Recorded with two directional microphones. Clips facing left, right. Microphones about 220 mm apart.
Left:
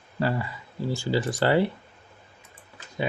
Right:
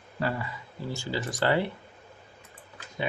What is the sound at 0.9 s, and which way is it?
Speech, 30° left (ahead or behind).